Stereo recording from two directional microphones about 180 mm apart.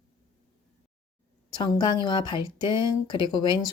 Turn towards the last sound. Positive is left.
turn(degrees=25)  # may be behind; listen again after turning